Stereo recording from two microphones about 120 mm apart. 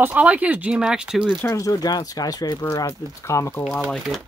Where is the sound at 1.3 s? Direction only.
25° left (ahead or behind).